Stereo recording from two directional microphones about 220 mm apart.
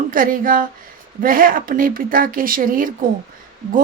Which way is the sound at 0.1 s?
40° right (ahead or behind).